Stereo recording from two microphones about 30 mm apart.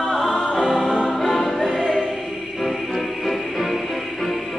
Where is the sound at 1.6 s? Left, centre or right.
Centre.